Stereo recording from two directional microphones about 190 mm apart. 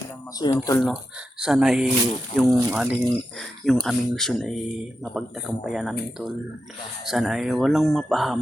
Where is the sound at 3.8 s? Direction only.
Centre (ahead or behind).